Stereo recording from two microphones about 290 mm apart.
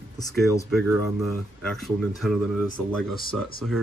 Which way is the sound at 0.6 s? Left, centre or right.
Centre.